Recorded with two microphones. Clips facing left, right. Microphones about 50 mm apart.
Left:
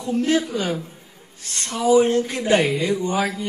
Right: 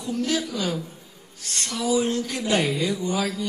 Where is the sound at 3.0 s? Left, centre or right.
Left.